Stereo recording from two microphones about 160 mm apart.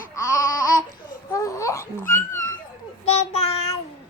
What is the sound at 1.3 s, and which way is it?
Babbling, 20° left (ahead or behind).